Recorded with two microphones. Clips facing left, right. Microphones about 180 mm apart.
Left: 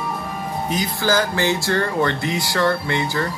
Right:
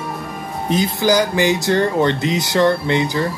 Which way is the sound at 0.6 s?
25° right (ahead or behind).